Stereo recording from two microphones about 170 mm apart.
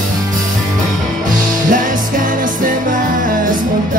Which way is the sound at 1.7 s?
50° right (ahead or behind).